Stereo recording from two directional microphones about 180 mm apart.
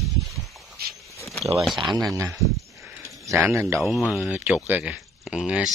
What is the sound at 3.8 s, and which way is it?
Speech, centre (ahead or behind).